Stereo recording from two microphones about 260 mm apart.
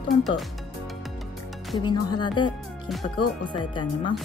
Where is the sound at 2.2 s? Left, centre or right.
Centre.